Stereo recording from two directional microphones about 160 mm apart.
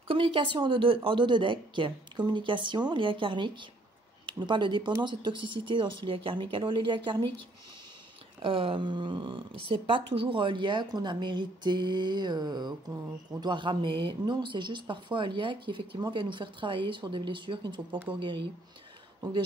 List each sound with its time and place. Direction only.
0.1 s speech: 35° right (ahead or behind)
8.4 s speech: 35° right (ahead or behind)
19.2 s speech: 25° right (ahead or behind)